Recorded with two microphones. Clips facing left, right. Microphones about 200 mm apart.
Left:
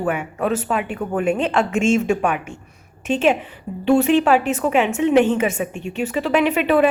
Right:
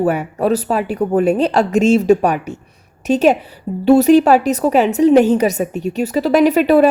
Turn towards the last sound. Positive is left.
turn(degrees=-40)  # may be behind; listen again after turning